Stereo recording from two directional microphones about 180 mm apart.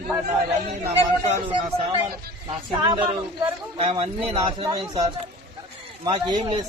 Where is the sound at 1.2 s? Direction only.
30° right (ahead or behind).